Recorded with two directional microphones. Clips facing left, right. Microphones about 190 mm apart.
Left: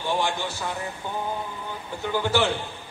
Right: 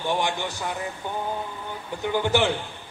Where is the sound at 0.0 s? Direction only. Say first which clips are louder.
Even; 15° right (ahead or behind).